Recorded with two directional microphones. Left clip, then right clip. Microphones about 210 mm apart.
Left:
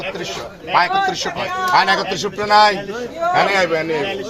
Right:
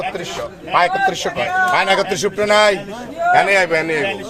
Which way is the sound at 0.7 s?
55° right (ahead or behind).